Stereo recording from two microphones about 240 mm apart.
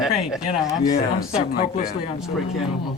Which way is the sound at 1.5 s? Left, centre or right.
Left.